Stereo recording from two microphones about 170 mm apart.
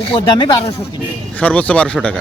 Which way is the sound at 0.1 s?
30° left (ahead or behind).